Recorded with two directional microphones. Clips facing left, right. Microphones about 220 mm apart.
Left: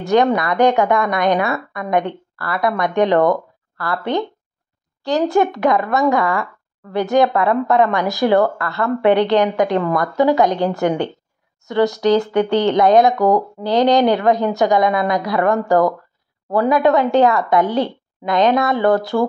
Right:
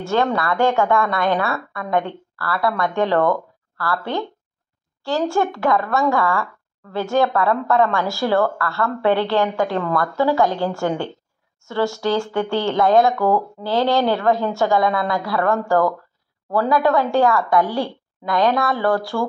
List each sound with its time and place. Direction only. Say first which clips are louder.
0.0 s a woman's voice: left 5 dB; 15° left (ahead or behind)